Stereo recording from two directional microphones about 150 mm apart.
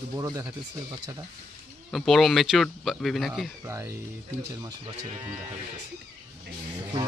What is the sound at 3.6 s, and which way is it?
Speech, 20° right (ahead or behind).